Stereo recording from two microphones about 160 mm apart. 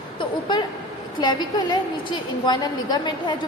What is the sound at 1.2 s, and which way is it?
A woman's voice, 25° left (ahead or behind).